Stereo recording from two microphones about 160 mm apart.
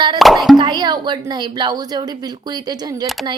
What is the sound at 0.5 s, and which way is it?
A woman's voice, 30° right (ahead or behind).